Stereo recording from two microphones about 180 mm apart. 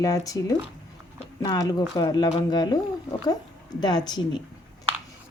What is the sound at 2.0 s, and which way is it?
A woman's voice, 20° left (ahead or behind).